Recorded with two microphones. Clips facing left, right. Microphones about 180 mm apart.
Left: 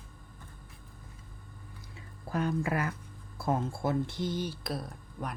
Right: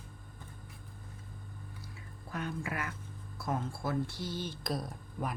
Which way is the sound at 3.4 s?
25° left (ahead or behind).